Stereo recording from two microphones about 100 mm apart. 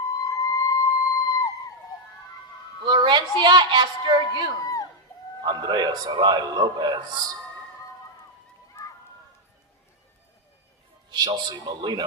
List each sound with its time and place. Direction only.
0.3 s a sound: 35° left (ahead or behind)
2.8 s a man's voice: 50° right (ahead or behind)
4.6 s crowd: 35° left (ahead or behind)
5.4 s a man's voice: 45° right (ahead or behind)
11.1 s a man's voice: 45° right (ahead or behind)